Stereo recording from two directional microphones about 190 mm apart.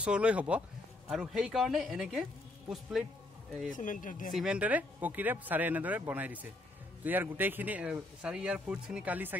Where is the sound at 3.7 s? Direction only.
45° left (ahead or behind).